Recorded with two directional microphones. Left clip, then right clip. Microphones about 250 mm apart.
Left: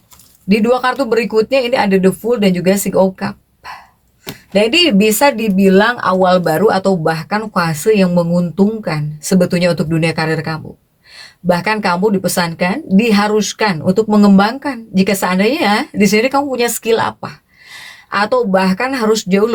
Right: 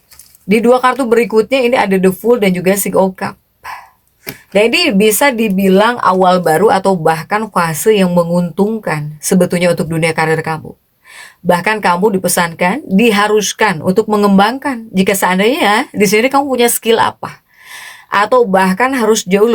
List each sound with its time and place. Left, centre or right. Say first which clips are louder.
0.4 s speech: right 4 dB; right